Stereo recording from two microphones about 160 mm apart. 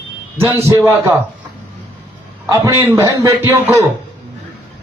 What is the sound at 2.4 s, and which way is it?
A man's voice, 15° right (ahead or behind).